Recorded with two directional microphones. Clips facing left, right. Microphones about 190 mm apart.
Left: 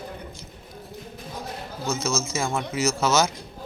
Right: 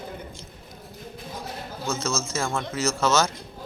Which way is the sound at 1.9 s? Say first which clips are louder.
Left 2 dB; 10° left (ahead or behind).